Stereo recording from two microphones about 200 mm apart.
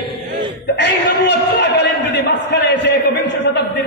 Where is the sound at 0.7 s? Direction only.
60° left (ahead or behind).